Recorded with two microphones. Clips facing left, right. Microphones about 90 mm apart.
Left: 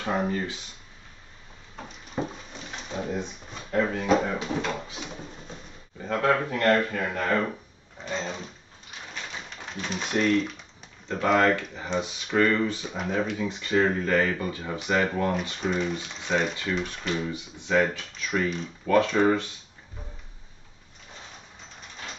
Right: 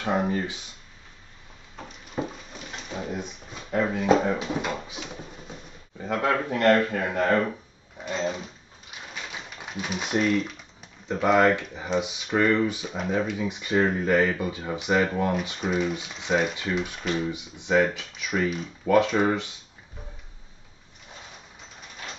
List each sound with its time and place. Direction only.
0.0 s speech: 15° right (ahead or behind)
1.8 s a sound: 5° right (ahead or behind)
3.8 s speech: 15° right (ahead or behind)
6.0 s speech: 15° right (ahead or behind)
9.1 s typewriter: 5° right (ahead or behind)
11.1 s speech: 5° right (ahead or behind)
11.3 s speech: 15° right (ahead or behind)
12.8 s speech: centre (ahead or behind)
13.5 s speech: 15° right (ahead or behind)